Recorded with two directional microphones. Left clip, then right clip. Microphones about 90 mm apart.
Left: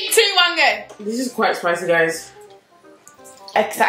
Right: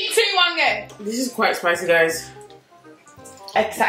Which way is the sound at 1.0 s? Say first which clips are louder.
Left 2 dB; 10° right (ahead or behind).